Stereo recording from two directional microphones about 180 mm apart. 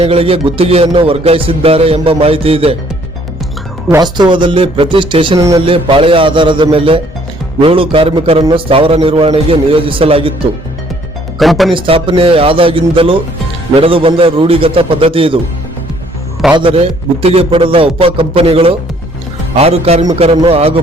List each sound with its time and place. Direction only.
0.0 s music: 35° right (ahead or behind)
3.8 s speech: 20° right (ahead or behind)
7.6 s music: 30° right (ahead or behind)
11.3 s speech: centre (ahead or behind)
11.7 s speech: 30° right (ahead or behind)
13.7 s music: 30° right (ahead or behind)
16.6 s speech: 30° right (ahead or behind)
17.2 s music: 30° right (ahead or behind)